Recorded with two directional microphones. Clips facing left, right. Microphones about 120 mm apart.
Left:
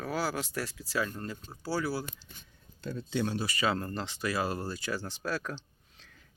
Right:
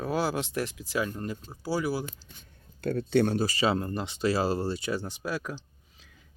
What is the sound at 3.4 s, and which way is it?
Speech, 25° right (ahead or behind).